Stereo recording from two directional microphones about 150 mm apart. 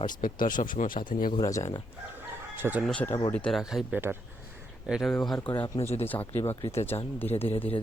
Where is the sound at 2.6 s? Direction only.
15° right (ahead or behind).